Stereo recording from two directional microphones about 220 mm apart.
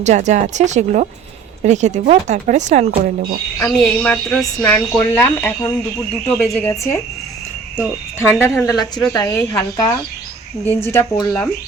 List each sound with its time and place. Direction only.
0.0 s speech: 30° right (ahead or behind)
3.6 s speech: 5° left (ahead or behind)
8.2 s speech: 10° left (ahead or behind)
9.1 s speech: 15° left (ahead or behind)